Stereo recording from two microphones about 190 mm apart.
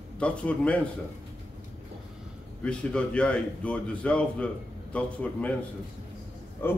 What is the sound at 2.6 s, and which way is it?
A man's voice, 5° left (ahead or behind).